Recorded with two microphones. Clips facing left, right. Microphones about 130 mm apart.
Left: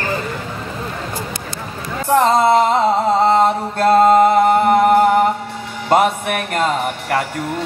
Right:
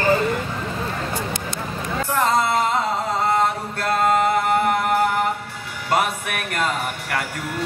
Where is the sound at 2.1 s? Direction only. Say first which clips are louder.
Left 8 dB; 30° left (ahead or behind).